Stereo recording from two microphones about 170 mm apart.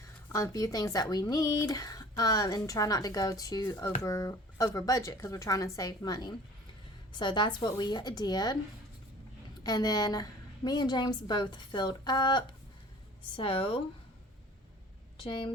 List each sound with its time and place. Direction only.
0.3 s speech: 20° left (ahead or behind)
9.6 s speech: 20° left (ahead or behind)
15.2 s speech: 30° left (ahead or behind)